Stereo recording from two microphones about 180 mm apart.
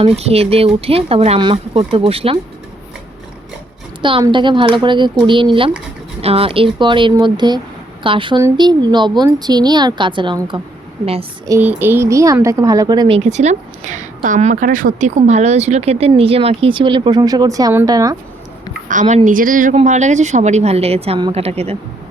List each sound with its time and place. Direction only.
0.0 s a woman's voice: 35° right (ahead or behind)
4.0 s a woman's voice: 25° right (ahead or behind)
11.4 s speech: 15° right (ahead or behind)
18.9 s a woman's voice: 45° right (ahead or behind)